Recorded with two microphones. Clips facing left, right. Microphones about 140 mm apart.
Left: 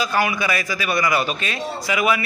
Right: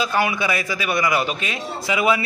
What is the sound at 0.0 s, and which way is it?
A man's voice, 25° right (ahead or behind).